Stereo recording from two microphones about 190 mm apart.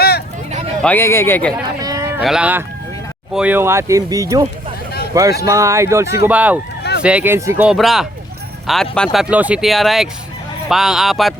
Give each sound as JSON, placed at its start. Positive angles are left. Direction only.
{"t": 0.8, "sound": "speech", "side_deg": 10}
{"t": 1.6, "sound": "a sound", "side_deg": -20}
{"t": 2.2, "sound": "speech", "side_deg": -5}
{"t": 7.7, "sound": "speech", "side_deg": 0}